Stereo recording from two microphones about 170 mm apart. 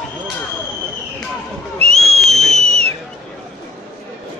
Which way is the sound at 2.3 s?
40° right (ahead or behind).